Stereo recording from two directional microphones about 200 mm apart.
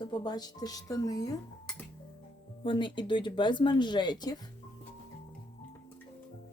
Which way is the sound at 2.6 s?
25° left (ahead or behind).